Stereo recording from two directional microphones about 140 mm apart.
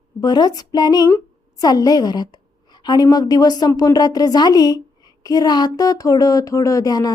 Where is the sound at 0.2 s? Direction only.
30° left (ahead or behind).